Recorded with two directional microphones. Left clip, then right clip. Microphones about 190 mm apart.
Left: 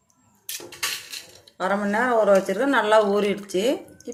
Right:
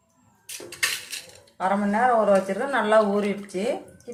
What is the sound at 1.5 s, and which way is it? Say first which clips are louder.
Speech: even; 50° left (ahead or behind).